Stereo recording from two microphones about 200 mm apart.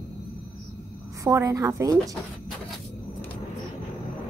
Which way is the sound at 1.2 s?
15° right (ahead or behind).